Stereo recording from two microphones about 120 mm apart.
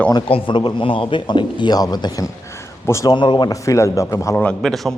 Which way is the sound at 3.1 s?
40° left (ahead or behind).